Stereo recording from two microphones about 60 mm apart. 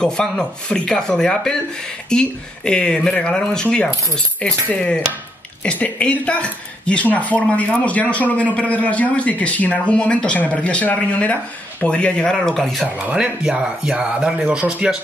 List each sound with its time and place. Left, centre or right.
0.0 s speech: centre
12.8 s speech: right
13.4 s speech: centre